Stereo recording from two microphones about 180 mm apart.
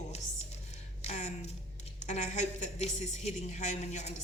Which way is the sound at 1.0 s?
40° left (ahead or behind).